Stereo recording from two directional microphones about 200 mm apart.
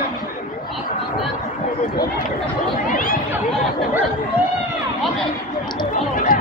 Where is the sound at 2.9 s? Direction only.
45° left (ahead or behind).